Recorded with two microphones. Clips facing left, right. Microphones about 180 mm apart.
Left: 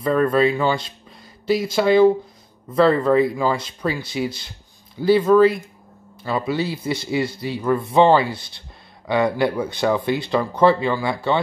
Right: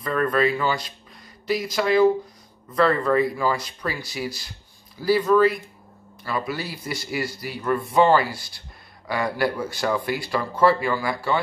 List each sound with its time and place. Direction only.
0.0 s speech: 25° left (ahead or behind)